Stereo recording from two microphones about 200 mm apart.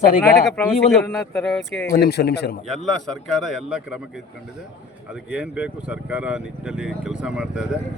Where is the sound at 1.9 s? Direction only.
50° left (ahead or behind).